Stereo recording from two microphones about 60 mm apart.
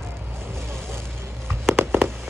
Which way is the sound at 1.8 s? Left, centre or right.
Right.